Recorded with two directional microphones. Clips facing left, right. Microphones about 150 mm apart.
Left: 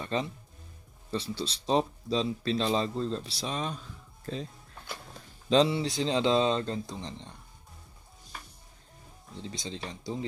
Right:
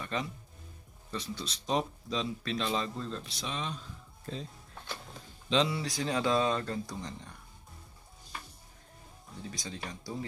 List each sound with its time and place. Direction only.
0.0 s speech: 30° left (ahead or behind)
5.7 s speech: 25° left (ahead or behind)
9.4 s speech: 25° left (ahead or behind)